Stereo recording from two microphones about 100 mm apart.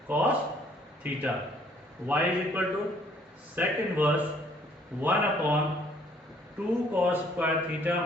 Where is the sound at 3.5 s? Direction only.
15° right (ahead or behind).